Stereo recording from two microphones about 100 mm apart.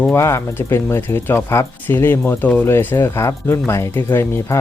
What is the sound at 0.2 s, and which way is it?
Speech, 30° left (ahead or behind).